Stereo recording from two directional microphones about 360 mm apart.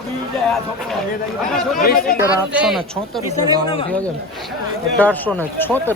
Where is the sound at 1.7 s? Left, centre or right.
Left.